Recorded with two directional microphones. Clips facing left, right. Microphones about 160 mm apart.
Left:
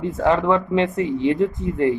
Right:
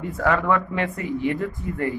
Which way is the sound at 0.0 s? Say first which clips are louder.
Left 4 dB; 25° left (ahead or behind).